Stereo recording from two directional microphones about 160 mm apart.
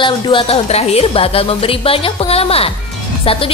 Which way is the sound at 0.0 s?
30° left (ahead or behind).